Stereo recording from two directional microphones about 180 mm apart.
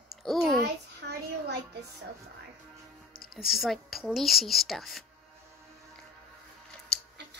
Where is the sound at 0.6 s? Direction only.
65° right (ahead or behind).